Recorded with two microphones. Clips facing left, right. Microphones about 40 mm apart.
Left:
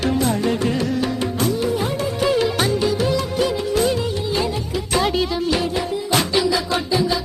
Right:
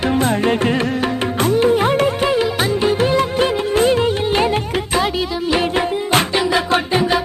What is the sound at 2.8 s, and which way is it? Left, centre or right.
Music, right.